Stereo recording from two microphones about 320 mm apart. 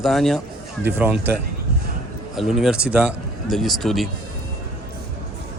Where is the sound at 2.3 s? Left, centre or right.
Centre.